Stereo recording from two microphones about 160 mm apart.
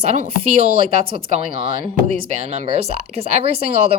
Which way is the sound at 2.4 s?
40° right (ahead or behind).